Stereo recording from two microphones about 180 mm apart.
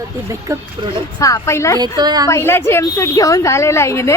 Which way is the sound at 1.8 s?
25° right (ahead or behind).